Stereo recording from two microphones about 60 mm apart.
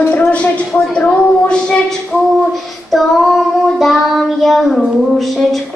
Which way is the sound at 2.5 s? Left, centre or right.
Centre.